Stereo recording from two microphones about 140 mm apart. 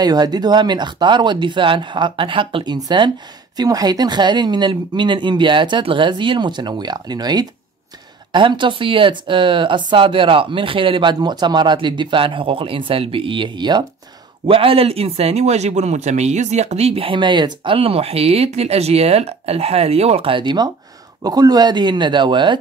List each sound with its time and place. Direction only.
0.0 s speech: 30° right (ahead or behind)